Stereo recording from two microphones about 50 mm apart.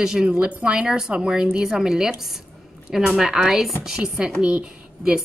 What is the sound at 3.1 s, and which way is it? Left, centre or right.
A woman's voice, centre.